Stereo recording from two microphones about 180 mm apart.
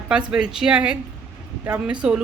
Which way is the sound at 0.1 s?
5° right (ahead or behind).